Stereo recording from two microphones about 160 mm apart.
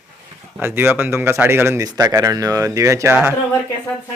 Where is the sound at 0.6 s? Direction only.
15° right (ahead or behind).